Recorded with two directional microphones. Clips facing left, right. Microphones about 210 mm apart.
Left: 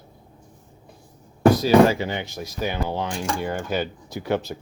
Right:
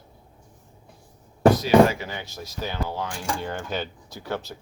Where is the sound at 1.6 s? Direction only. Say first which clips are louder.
Left 1 dB; 30° left (ahead or behind).